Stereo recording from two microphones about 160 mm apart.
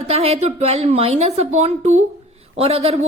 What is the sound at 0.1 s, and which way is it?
A woman's voice, 40° right (ahead or behind).